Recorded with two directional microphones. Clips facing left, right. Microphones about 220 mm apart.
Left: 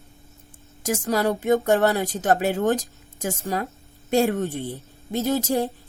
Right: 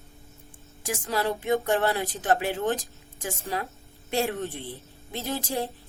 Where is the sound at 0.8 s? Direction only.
40° left (ahead or behind).